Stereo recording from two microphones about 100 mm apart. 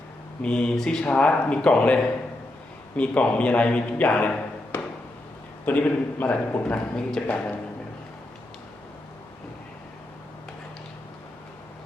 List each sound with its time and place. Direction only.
0.4 s a man's voice: 10° left (ahead or behind)